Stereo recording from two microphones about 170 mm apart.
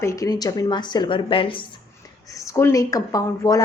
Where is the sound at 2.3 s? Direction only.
15° left (ahead or behind).